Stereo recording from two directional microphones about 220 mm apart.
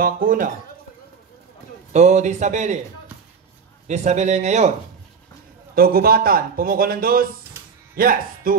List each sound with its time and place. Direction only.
0.0 s a man's voice: 40° right (ahead or behind)
1.9 s a man's voice: 30° right (ahead or behind)
3.8 s a man's voice: 30° right (ahead or behind)
5.8 s a man's voice: 45° right (ahead or behind)